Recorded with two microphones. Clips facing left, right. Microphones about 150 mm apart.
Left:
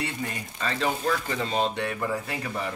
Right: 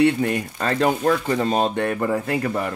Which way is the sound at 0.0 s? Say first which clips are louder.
Right 14 dB; 65° right (ahead or behind).